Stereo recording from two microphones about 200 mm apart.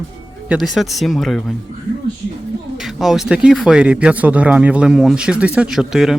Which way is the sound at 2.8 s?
Centre (ahead or behind).